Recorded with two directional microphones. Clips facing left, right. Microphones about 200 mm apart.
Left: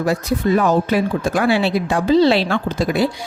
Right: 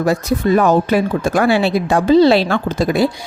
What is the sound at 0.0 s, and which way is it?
Speech, 45° right (ahead or behind).